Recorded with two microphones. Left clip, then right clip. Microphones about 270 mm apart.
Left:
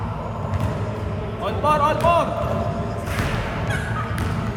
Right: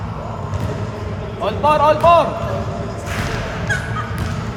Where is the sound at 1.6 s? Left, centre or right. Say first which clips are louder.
Right 6 dB; right.